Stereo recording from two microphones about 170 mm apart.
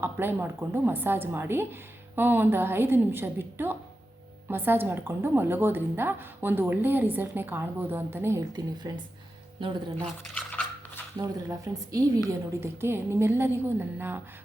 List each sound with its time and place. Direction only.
0.0 s a woman's voice: 10° right (ahead or behind)
10.3 s a sound: 10° left (ahead or behind)
11.2 s a woman's voice: 20° right (ahead or behind)